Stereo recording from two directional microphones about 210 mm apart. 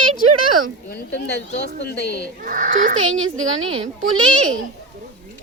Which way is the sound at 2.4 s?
40° right (ahead or behind).